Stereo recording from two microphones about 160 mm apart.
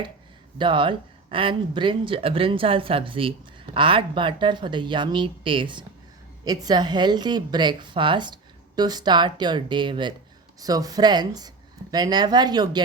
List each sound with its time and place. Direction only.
0.6 s a woman's voice: 30° right (ahead or behind)